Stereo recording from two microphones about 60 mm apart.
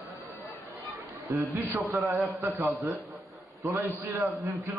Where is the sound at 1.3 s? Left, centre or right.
Right.